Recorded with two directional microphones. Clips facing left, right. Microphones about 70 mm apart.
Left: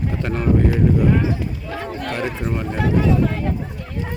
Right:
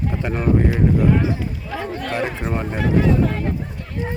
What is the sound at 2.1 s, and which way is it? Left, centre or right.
Speech, right.